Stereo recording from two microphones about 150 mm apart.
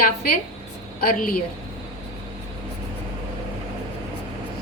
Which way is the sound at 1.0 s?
75° left (ahead or behind).